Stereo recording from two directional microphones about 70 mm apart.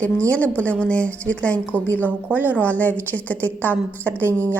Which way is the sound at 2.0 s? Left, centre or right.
Right.